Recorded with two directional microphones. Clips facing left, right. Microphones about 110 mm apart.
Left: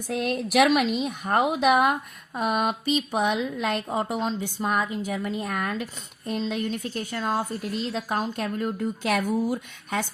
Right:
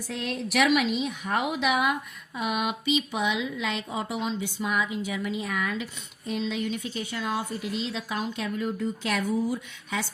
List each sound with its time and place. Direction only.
0.1 s speech: 55° left (ahead or behind)
0.8 s speech: centre (ahead or behind)
1.0 s speech: 45° left (ahead or behind)